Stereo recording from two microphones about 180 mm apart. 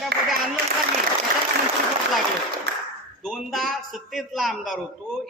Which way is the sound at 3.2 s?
Centre (ahead or behind).